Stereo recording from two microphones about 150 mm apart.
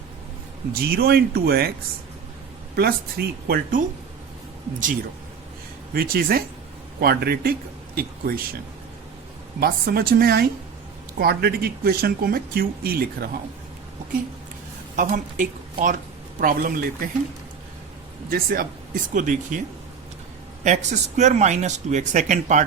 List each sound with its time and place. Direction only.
0.7 s speech: 90° right
2.7 s speech: 90° right; by 3.8 s 75° right (ahead or behind)
5.9 s speech: 80° right
9.6 s speech: 90° right
14.9 s speech: 60° right (ahead or behind)
18.3 s speech: 75° right (ahead or behind)
19.1 s speech: 60° right (ahead or behind)
20.7 s speech: 50° right (ahead or behind)